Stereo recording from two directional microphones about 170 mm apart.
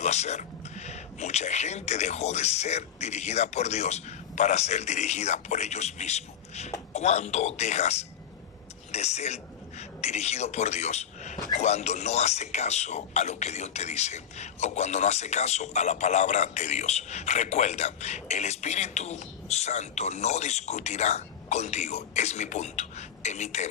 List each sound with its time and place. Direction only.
0.0 s a man's voice: 40° left (ahead or behind)